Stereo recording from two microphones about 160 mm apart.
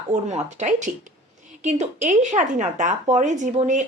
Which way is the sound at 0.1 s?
45° right (ahead or behind).